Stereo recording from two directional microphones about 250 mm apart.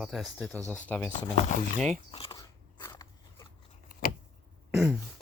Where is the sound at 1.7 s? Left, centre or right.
Centre.